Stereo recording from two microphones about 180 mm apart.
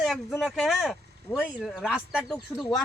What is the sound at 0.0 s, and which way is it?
Speech, centre (ahead or behind).